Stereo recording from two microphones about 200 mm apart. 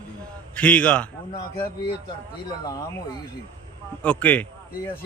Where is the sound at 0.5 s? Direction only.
5° left (ahead or behind).